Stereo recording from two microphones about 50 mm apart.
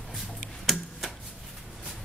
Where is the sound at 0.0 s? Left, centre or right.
Centre.